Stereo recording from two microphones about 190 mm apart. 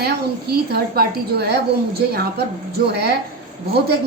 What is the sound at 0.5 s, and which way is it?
A woman's voice, 55° right (ahead or behind).